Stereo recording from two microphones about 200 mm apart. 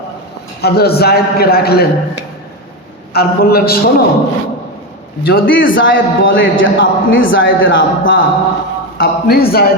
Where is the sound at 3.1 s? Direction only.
50° left (ahead or behind).